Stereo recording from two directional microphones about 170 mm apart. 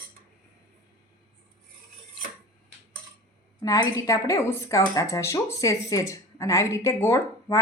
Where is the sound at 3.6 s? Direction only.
20° left (ahead or behind).